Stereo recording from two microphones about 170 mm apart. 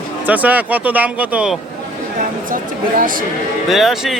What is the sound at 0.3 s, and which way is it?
Speech, 10° right (ahead or behind).